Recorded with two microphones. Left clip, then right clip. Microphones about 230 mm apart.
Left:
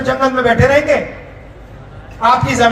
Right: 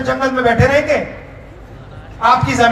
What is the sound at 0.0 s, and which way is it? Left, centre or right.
Speech, left.